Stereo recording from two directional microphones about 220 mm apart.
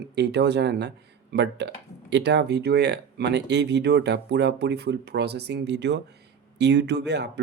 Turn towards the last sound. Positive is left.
turn(degrees=-50)  # may be behind; listen again after turning